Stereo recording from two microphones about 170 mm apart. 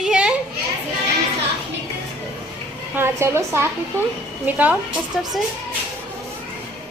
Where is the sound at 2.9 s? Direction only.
15° right (ahead or behind).